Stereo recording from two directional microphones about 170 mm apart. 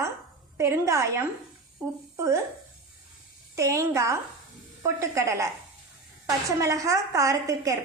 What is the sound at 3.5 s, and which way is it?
A woman's voice, 20° right (ahead or behind).